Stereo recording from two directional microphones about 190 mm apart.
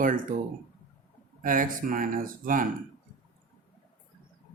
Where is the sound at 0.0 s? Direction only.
45° right (ahead or behind).